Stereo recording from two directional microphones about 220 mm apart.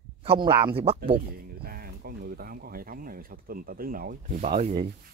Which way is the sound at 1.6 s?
45° right (ahead or behind).